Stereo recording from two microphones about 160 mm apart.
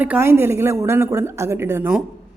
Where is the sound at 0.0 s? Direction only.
15° right (ahead or behind).